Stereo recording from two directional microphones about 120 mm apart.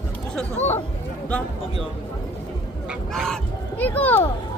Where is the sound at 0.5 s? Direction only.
65° left (ahead or behind).